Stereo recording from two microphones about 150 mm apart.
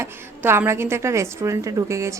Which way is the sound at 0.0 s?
15° right (ahead or behind).